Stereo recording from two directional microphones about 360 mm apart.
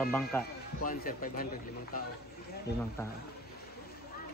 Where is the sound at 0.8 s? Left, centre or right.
Left.